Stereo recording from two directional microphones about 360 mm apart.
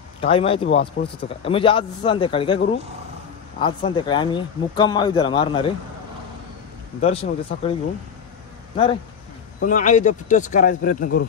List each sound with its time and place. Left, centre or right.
0.2 s speech: centre
7.0 s speech: centre
9.6 s speech: left